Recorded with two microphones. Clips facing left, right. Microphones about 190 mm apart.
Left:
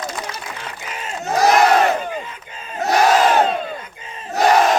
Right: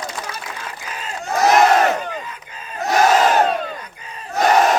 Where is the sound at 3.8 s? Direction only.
25° left (ahead or behind).